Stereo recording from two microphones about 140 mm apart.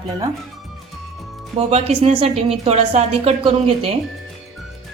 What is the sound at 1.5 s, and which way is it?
A woman's voice, 45° right (ahead or behind).